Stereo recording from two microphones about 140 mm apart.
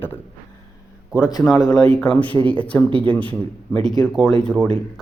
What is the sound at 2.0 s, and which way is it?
Speech, 10° left (ahead or behind).